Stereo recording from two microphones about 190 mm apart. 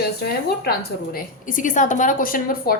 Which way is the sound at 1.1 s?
45° left (ahead or behind).